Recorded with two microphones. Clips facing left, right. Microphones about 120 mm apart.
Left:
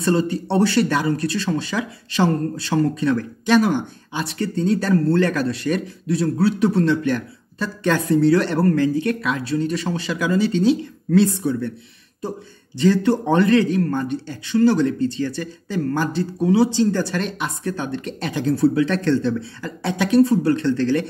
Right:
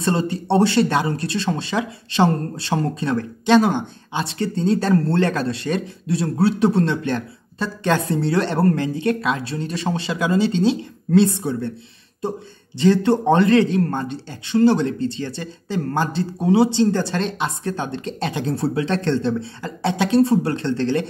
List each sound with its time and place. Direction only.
0.0 s speech: 25° right (ahead or behind)